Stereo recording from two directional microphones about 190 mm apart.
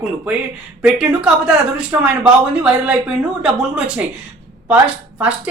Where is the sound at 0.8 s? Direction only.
5° right (ahead or behind).